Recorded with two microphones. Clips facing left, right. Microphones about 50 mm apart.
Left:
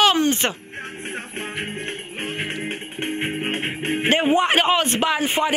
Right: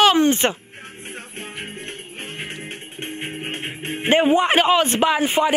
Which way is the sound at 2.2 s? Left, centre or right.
Left.